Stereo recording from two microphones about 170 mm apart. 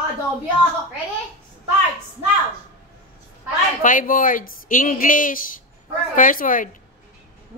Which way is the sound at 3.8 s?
50° left (ahead or behind).